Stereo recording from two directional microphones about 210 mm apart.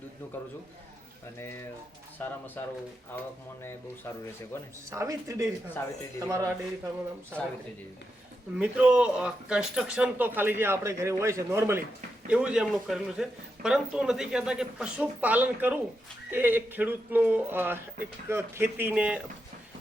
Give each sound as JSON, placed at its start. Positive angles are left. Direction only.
{"t": 1.4, "sound": "speech", "side_deg": 10}
{"t": 4.9, "sound": "speech", "side_deg": -15}
{"t": 8.5, "sound": "a man's voice", "side_deg": -5}